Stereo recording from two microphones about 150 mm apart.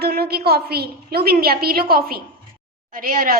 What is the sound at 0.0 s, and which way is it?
A child's voice, 90° right.